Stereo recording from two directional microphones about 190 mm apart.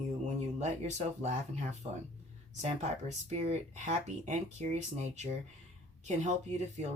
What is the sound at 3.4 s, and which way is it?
Speech, 35° right (ahead or behind).